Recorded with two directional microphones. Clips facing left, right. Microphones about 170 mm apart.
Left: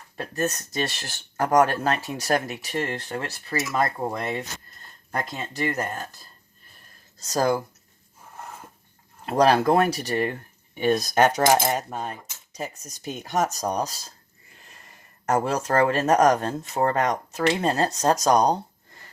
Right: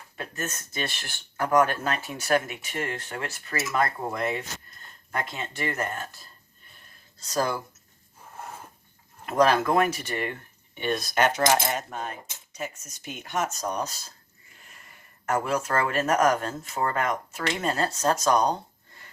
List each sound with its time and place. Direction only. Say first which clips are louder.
0.2 s speech: left 7 dB; 40° left (ahead or behind)
7.2 s speech: left 5 dB; 40° left (ahead or behind)
9.2 s speech: left 3 dB; 35° left (ahead or behind)
15.3 s speech: left 3 dB; 40° left (ahead or behind)